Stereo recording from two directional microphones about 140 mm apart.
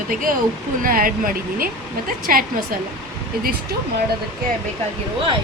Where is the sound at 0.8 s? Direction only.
90° right.